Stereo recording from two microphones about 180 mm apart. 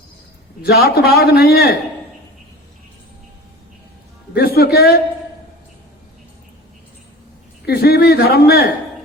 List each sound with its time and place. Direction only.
0.6 s a man's voice: 60° left (ahead or behind)
4.4 s speech: 60° left (ahead or behind)
7.7 s a man's voice: 60° left (ahead or behind)